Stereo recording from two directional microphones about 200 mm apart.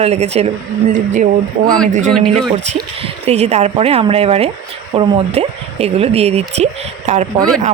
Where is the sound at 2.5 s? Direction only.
30° right (ahead or behind).